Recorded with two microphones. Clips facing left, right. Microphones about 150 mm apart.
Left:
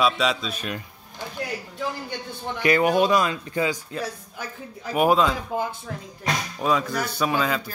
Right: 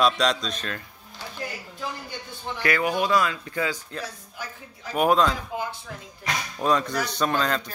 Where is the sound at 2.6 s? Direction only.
25° left (ahead or behind).